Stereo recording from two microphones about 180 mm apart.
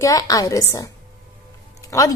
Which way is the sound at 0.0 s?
20° left (ahead or behind).